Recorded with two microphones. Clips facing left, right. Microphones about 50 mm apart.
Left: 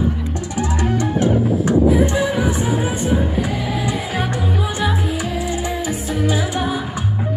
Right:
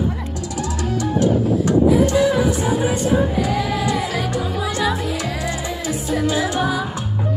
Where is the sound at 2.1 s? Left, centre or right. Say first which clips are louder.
Right 3 dB; left.